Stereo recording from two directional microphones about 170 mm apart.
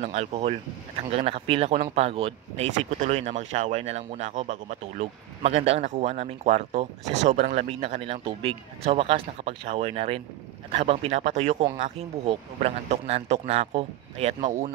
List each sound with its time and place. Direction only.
0.0 s speech: 40° right (ahead or behind)